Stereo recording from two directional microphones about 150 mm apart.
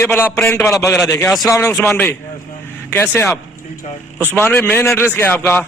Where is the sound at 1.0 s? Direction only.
20° left (ahead or behind).